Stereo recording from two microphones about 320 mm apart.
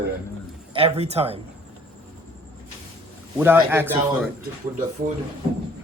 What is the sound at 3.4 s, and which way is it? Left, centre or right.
Speech, centre.